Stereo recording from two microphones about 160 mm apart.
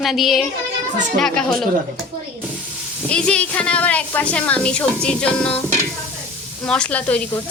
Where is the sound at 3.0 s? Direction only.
5° left (ahead or behind).